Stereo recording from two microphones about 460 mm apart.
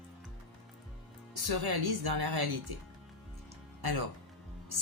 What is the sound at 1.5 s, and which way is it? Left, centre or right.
Speech, right.